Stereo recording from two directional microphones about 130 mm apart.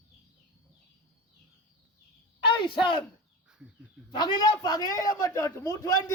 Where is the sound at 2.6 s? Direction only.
40° left (ahead or behind).